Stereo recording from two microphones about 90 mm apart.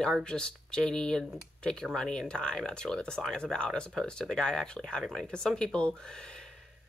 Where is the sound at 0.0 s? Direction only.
10° left (ahead or behind).